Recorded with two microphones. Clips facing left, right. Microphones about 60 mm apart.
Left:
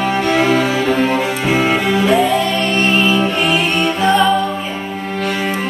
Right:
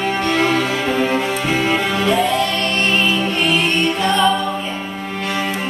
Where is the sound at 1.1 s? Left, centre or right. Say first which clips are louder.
Left 2 dB; centre.